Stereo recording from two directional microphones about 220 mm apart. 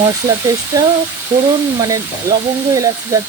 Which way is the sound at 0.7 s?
15° right (ahead or behind).